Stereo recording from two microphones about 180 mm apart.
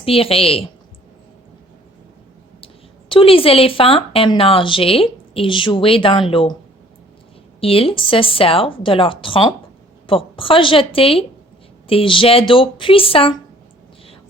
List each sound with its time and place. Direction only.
0.0 s speech: 30° left (ahead or behind)
3.1 s a woman's voice: 30° left (ahead or behind)
7.6 s a woman's voice: 30° left (ahead or behind)